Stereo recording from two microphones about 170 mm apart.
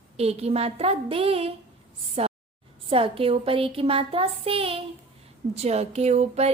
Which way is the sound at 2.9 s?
35° right (ahead or behind).